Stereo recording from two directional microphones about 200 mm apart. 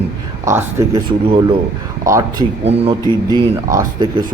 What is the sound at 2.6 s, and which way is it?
Speech, 30° right (ahead or behind).